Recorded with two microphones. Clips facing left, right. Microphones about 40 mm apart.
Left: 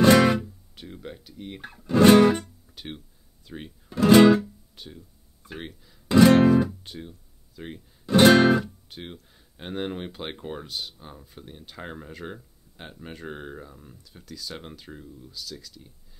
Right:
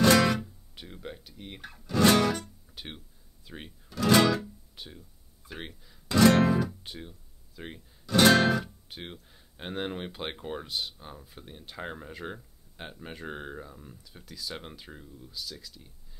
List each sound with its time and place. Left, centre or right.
0.0 s guitar: centre
0.4 s speech: centre
1.6 s speech: centre
2.0 s music: left
2.4 s guitar: centre
3.4 s speech: centre
3.9 s music: left
4.4 s music: centre
5.5 s speech: centre
6.0 s music: centre
6.8 s music: centre
8.0 s music: left
8.8 s speech: centre